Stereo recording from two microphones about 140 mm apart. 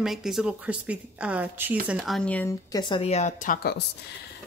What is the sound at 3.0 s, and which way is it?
Speech, 55° left (ahead or behind).